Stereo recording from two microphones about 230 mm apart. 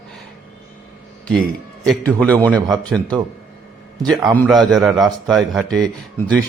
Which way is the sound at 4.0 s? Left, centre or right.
Centre.